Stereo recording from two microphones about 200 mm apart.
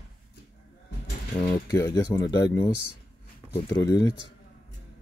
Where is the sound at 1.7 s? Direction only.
15° left (ahead or behind).